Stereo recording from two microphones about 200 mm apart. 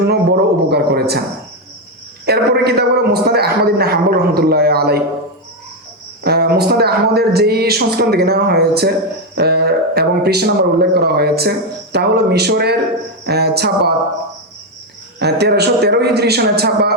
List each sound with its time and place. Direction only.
0.1 s a sound: 55° right (ahead or behind)
2.2 s speech: 55° right (ahead or behind)
6.2 s speech: 55° right (ahead or behind)
15.2 s a man's voice: 55° right (ahead or behind)